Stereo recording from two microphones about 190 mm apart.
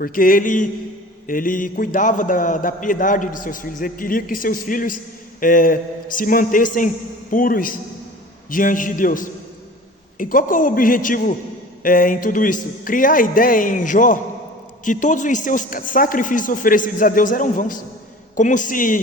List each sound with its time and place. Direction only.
0.0 s a man's voice: 45° left (ahead or behind)